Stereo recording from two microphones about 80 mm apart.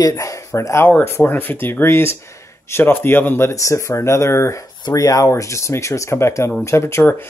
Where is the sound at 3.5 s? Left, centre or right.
Left.